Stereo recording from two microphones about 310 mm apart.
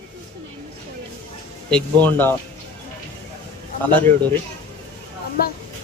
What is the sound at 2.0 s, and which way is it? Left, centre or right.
Speech, centre.